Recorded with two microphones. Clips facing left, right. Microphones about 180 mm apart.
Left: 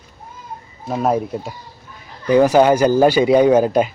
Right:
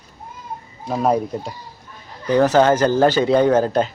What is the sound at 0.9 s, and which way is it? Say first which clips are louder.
Speech: even; 5° left (ahead or behind).